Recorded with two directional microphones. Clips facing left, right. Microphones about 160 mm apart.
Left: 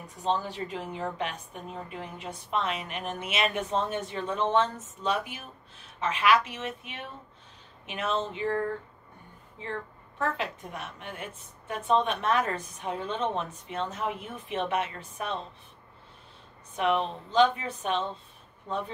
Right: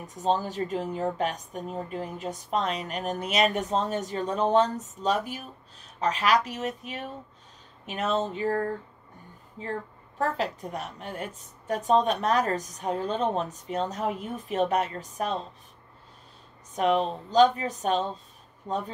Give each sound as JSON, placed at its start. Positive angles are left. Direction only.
{"t": 0.0, "sound": "a woman's voice", "side_deg": -40}
{"t": 16.7, "sound": "a woman's voice", "side_deg": -40}